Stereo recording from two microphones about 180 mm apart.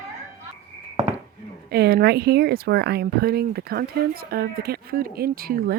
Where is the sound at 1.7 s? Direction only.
60° right (ahead or behind).